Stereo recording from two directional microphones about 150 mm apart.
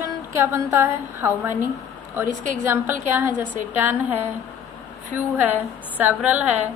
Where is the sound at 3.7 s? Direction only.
10° right (ahead or behind).